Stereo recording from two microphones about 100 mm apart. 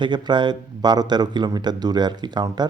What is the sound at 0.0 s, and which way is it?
A man's voice, 50° right (ahead or behind).